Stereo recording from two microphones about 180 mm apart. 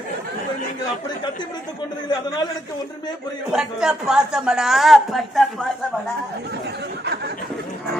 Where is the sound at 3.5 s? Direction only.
5° right (ahead or behind).